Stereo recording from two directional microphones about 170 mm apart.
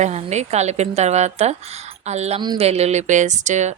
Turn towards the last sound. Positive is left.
turn(degrees=-45)  # may be behind; listen again after turning